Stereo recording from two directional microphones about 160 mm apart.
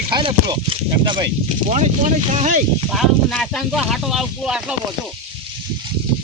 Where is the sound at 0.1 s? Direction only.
30° right (ahead or behind).